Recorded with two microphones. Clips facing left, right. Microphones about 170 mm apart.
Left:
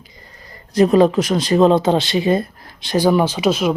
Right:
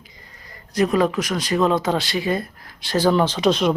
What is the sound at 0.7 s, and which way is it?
Speech, 30° left (ahead or behind).